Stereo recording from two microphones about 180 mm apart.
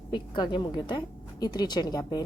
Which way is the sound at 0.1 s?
25° left (ahead or behind).